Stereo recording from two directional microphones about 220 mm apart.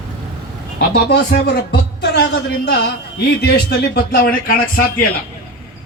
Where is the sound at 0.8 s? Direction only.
50° left (ahead or behind).